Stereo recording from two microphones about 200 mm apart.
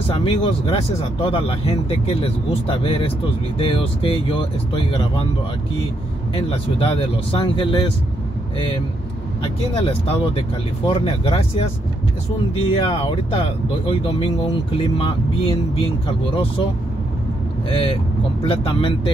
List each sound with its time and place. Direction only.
0.1 s speech: 30° left (ahead or behind)
6.3 s speech: 25° left (ahead or behind)
9.4 s speech: 30° left (ahead or behind)
12.8 s speech: 25° left (ahead or behind)
17.6 s speech: 30° left (ahead or behind)